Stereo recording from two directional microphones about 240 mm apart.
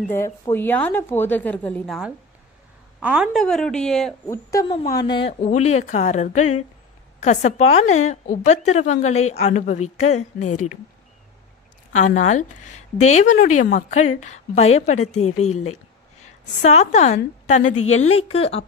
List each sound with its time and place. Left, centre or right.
0.1 s a woman's voice: centre
4.5 s a woman's voice: centre; by 10.5 s left
11.9 s a woman's voice: left
15.6 s a sound: left
16.6 s a woman's voice: left
17.7 s a woman's voice: left
18.1 s a woman's voice: left